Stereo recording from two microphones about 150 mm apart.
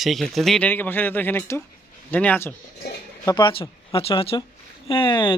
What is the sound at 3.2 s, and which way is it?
Speech, 30° left (ahead or behind).